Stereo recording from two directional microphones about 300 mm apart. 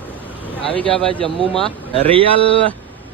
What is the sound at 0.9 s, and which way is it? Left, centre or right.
Speech, centre.